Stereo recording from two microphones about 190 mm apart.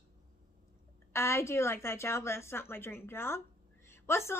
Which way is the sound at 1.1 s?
15° left (ahead or behind).